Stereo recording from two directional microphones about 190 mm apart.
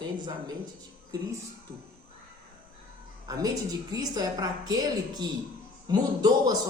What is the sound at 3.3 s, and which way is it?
A man's voice, 20° right (ahead or behind).